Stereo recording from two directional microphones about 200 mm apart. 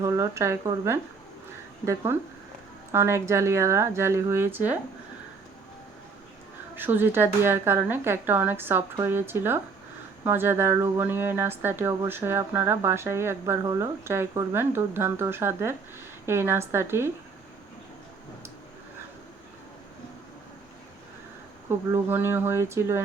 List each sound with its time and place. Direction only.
0.0 s speech: 15° right (ahead or behind)
6.7 s speech: 10° right (ahead or behind)
21.7 s speech: 10° right (ahead or behind)